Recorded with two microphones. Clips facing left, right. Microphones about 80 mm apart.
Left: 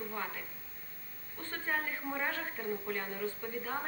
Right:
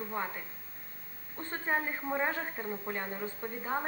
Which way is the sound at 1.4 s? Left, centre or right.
Right.